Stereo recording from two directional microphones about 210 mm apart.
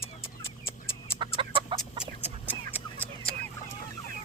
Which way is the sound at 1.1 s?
25° right (ahead or behind).